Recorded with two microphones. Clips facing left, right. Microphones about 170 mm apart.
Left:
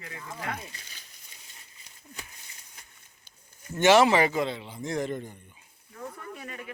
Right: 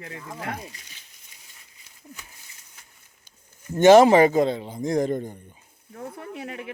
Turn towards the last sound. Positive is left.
turn(degrees=-65)  # may be behind; listen again after turning